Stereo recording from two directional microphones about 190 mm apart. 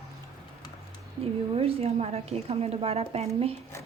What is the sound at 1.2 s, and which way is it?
A woman's voice, 30° right (ahead or behind).